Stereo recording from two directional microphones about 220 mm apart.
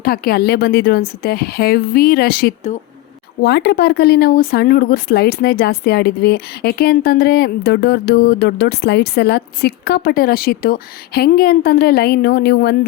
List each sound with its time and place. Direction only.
0.0 s speech: 45° left (ahead or behind)